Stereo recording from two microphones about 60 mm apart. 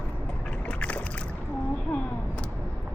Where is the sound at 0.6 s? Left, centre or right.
Left.